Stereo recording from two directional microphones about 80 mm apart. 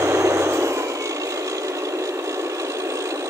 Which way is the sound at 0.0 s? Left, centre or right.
Right.